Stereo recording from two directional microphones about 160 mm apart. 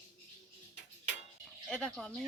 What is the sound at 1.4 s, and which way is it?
Dishes, 5° left (ahead or behind).